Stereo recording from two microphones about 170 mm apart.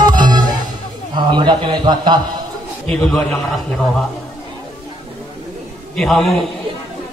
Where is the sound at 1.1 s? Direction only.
25° right (ahead or behind).